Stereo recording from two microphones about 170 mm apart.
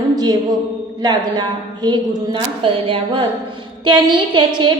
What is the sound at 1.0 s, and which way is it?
A woman's voice, 25° right (ahead or behind).